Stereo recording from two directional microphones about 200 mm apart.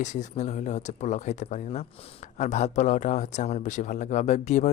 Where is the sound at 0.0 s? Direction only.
35° left (ahead or behind).